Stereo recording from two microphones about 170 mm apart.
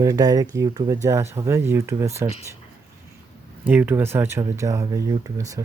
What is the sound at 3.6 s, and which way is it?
Speech, 10° right (ahead or behind).